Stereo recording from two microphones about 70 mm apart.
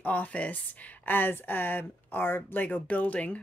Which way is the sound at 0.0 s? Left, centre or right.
Left.